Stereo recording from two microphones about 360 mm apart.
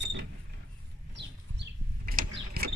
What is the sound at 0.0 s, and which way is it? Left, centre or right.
Creak, right.